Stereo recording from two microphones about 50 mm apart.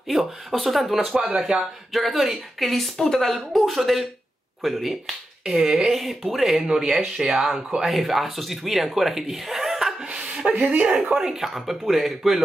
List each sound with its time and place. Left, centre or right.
0.1 s speech: centre
10.0 s chuckle: centre
10.5 s speech: right
11.0 s speech: centre